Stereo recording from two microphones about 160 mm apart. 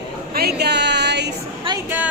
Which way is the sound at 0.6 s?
90° right.